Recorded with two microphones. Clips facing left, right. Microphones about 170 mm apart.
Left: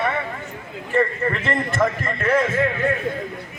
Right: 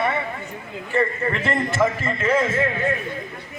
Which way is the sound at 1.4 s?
5° right (ahead or behind).